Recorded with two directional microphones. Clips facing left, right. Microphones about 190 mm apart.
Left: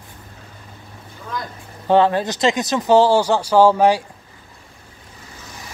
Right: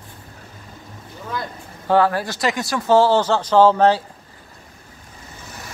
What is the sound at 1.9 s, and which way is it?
Speech, 20° left (ahead or behind).